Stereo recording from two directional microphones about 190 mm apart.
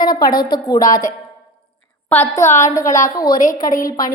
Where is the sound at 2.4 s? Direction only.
40° left (ahead or behind).